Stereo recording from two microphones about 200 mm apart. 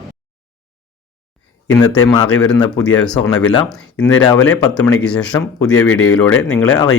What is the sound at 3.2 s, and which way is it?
Speech, 20° left (ahead or behind).